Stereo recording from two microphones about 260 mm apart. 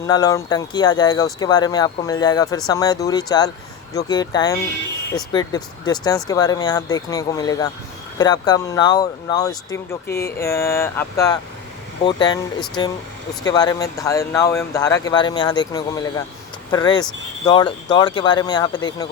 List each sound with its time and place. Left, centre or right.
0.1 s speech: centre